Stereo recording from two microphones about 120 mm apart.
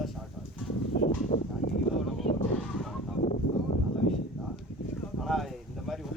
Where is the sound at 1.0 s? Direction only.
80° left.